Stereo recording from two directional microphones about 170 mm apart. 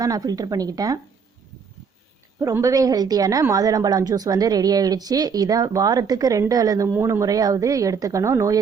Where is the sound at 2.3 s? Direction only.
20° right (ahead or behind).